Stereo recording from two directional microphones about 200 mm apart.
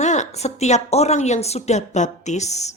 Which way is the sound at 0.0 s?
35° left (ahead or behind).